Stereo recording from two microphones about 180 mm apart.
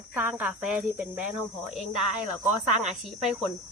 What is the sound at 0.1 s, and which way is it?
Speech, 10° right (ahead or behind).